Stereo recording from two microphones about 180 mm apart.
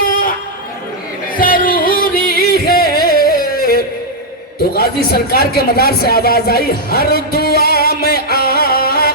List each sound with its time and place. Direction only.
1.4 s music: 50° left (ahead or behind)
4.7 s speech: 60° left (ahead or behind)